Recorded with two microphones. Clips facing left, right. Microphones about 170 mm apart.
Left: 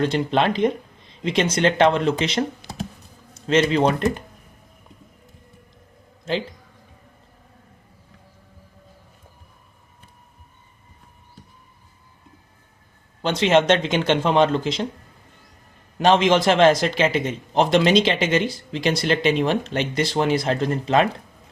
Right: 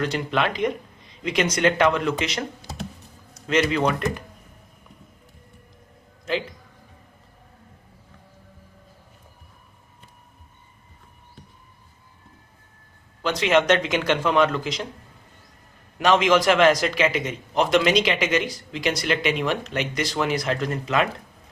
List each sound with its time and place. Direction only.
0.0 s a man's voice: 25° left (ahead or behind)
13.2 s a man's voice: 30° left (ahead or behind)
16.0 s a man's voice: 30° left (ahead or behind)